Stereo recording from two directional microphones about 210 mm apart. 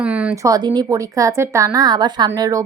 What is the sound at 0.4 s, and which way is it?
A woman's voice, 20° right (ahead or behind).